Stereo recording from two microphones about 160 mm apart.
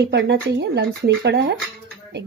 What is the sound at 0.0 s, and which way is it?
Speech, 90° right.